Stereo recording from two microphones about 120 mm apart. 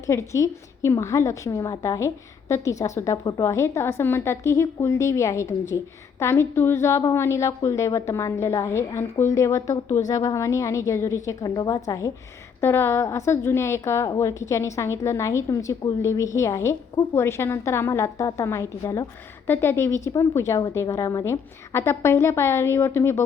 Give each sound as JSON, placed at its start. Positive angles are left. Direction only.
{"t": 0.1, "sound": "a woman's voice", "side_deg": 25}
{"t": 12.5, "sound": "a woman's voice", "side_deg": 20}